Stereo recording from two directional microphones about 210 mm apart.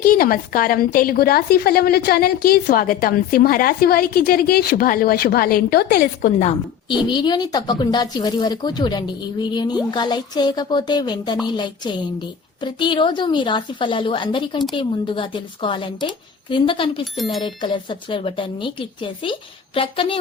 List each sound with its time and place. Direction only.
0.0 s a woman's voice: 45° left (ahead or behind)
6.8 s a woman's voice: 20° left (ahead or behind)